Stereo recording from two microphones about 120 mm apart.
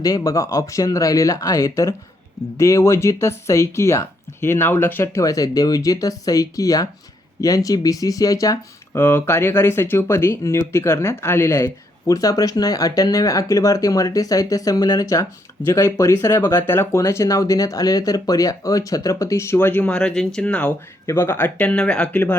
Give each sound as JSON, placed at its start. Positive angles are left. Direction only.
{"t": 0.0, "sound": "speech", "side_deg": 30}
{"t": 21.1, "sound": "speech", "side_deg": 20}